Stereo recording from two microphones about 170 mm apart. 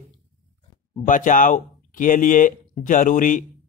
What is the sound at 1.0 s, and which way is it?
Speech, 50° left (ahead or behind).